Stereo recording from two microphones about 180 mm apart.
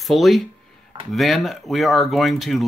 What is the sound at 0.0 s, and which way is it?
Speech, centre (ahead or behind).